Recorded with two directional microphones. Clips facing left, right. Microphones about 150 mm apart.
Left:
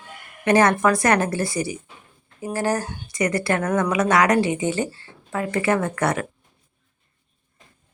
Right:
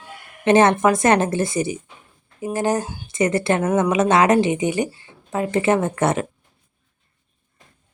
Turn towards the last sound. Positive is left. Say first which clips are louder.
# right 3 dB
turn(degrees=-25)  # may be behind; listen again after turning